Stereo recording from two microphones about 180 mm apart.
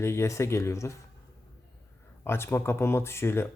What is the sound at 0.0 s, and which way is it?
Speech, 15° left (ahead or behind).